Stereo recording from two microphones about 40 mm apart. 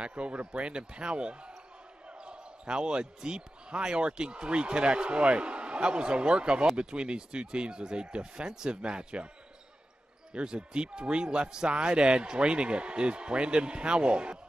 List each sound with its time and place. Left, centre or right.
0.0 s speech: right
10.3 s speech: right